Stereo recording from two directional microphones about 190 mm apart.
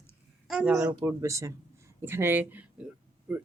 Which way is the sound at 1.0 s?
15° right (ahead or behind).